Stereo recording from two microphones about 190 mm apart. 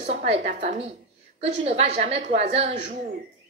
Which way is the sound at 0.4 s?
40° right (ahead or behind).